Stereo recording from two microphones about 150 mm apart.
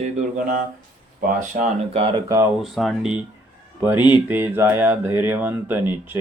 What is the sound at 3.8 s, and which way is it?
Speech, 10° right (ahead or behind).